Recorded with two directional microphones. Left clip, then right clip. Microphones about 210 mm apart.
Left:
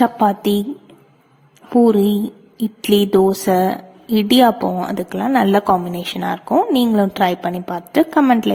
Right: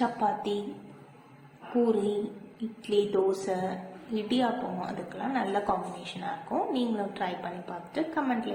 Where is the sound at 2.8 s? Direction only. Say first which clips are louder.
Left 12 dB; 45° left (ahead or behind).